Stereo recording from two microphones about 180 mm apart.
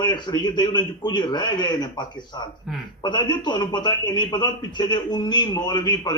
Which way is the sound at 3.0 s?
25° left (ahead or behind).